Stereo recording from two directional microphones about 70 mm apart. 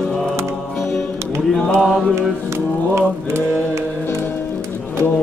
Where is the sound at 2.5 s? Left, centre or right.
Right.